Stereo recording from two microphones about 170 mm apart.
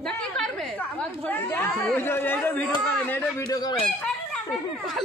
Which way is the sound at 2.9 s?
10° left (ahead or behind).